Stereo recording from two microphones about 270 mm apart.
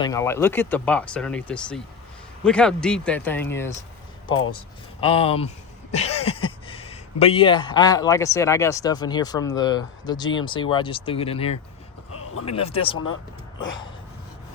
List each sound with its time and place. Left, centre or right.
0.0 s speech: centre
4.9 s speech: centre